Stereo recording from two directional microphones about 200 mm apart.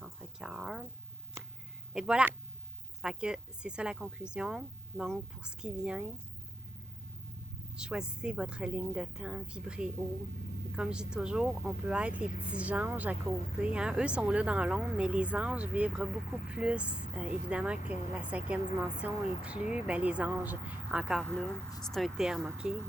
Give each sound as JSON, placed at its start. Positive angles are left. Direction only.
{"t": 0.0, "sound": "a sound", "side_deg": -5}
{"t": 1.9, "sound": "speech", "side_deg": -5}
{"t": 7.8, "sound": "speech", "side_deg": -5}
{"t": 12.2, "sound": "speech", "side_deg": 40}
{"t": 12.5, "sound": "a woman's voice", "side_deg": -5}